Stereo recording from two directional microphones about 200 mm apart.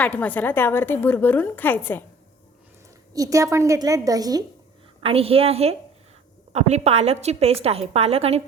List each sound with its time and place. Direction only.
0.0 s a woman's voice: 5° left (ahead or behind)
3.1 s a woman's voice: 15° right (ahead or behind)
5.0 s a woman's voice: 30° right (ahead or behind)